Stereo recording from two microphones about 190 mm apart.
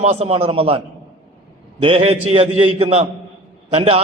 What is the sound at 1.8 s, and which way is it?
A man's voice, 30° right (ahead or behind).